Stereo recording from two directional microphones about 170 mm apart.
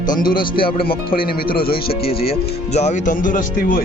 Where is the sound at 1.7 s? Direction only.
35° left (ahead or behind).